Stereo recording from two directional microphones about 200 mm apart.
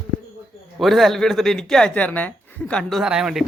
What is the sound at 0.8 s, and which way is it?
Speech, centre (ahead or behind).